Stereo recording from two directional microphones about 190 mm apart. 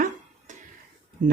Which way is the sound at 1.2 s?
45° right (ahead or behind).